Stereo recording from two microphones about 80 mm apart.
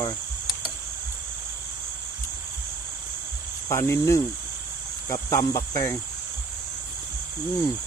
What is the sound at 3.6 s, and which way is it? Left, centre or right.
Speech, left.